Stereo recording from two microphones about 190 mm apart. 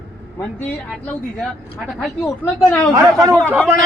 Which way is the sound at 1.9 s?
Centre (ahead or behind).